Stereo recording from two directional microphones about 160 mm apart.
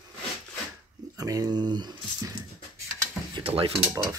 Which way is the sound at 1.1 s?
25° right (ahead or behind).